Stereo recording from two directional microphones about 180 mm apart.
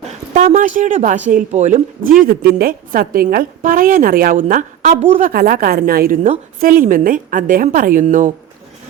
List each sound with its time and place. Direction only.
0.3 s a woman's voice: 45° right (ahead or behind)
2.2 s a woman's voice: 55° right (ahead or behind); by 5.3 s 35° right (ahead or behind)
5.3 s a woman's voice: 55° right (ahead or behind)